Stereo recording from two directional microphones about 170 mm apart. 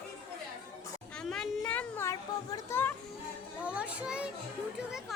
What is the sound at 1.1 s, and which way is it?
A child's voice, 5° left (ahead or behind).